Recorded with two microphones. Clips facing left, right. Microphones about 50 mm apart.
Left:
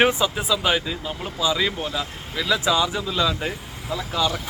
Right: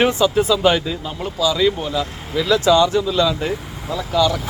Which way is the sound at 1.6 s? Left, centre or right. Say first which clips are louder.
Right 7 dB; centre.